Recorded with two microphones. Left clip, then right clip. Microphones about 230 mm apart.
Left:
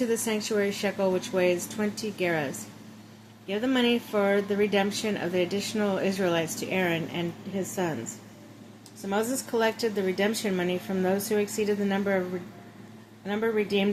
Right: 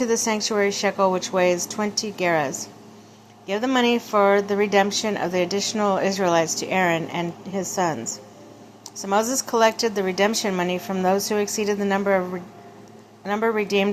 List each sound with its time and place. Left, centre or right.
0.0 s a woman's voice: centre
13.2 s a woman's voice: centre